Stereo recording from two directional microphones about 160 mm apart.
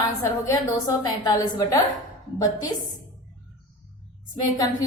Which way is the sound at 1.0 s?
25° left (ahead or behind).